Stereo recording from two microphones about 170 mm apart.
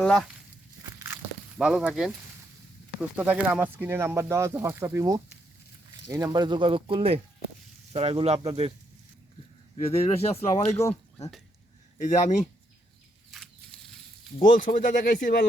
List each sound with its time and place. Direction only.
0.0 s speech: 5° left (ahead or behind)
0.9 s walk: 15° right (ahead or behind)
1.5 s speech: 5° right (ahead or behind)
3.2 s speech: 10° right (ahead or behind); by 8.7 s 35° right (ahead or behind)
9.7 s speech: 35° left (ahead or behind)
11.9 s speech: 45° left (ahead or behind)
13.3 s a sound: 5° left (ahead or behind)
14.4 s speech: 55° left (ahead or behind)